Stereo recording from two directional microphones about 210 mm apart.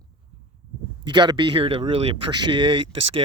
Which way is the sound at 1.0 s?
20° right (ahead or behind).